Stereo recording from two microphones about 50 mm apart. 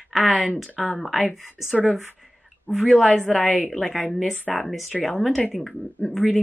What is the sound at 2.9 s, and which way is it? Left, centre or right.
A woman's voice, centre.